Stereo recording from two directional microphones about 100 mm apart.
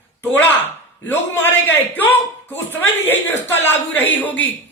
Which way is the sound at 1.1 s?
20° left (ahead or behind).